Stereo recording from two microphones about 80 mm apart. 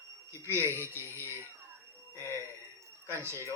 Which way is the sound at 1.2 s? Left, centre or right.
Right.